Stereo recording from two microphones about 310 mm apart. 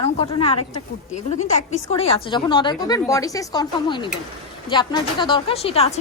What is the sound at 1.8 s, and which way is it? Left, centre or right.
A woman's voice, centre.